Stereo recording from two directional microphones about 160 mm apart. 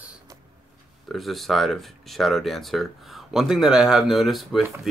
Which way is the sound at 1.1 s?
Centre (ahead or behind).